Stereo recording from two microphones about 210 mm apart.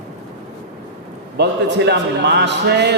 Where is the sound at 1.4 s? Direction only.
55° right (ahead or behind).